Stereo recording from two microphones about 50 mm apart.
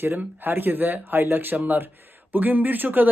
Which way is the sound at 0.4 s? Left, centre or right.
Right.